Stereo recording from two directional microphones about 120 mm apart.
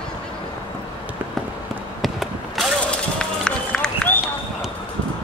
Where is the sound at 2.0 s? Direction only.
Centre (ahead or behind).